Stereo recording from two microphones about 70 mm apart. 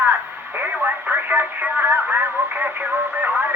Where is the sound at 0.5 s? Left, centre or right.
Right.